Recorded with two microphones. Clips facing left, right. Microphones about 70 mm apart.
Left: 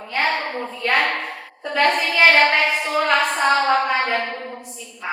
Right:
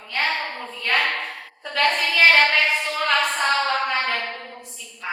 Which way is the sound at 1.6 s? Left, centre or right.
Left.